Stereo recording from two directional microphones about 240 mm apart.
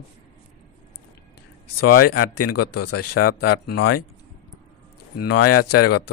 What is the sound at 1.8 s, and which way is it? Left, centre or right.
Speech, left.